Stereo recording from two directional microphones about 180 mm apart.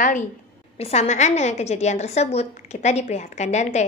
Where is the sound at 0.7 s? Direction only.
35° left (ahead or behind).